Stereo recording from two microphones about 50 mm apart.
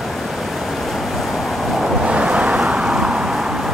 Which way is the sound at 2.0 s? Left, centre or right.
Right.